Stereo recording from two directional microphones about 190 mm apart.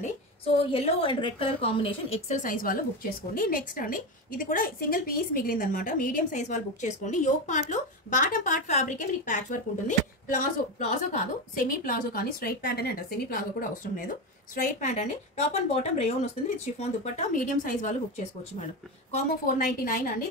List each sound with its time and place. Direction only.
0.0 s a woman's voice: 30° left (ahead or behind); by 20.0 s 45° left (ahead or behind)